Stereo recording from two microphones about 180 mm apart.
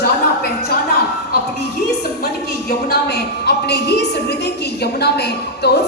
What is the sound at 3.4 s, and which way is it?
A woman's voice, 65° left (ahead or behind).